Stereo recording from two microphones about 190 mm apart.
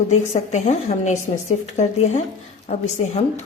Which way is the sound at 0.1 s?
40° left (ahead or behind).